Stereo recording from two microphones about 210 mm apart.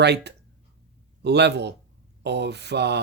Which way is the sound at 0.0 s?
55° right (ahead or behind).